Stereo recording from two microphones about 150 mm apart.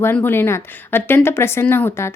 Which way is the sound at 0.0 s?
15° left (ahead or behind).